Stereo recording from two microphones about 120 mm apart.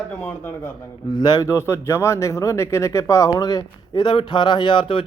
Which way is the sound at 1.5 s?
20° left (ahead or behind).